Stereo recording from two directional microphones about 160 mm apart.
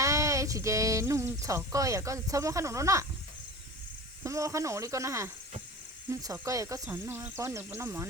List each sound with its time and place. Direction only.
0.0 s speech: 20° right (ahead or behind)
4.2 s speech: 20° right (ahead or behind)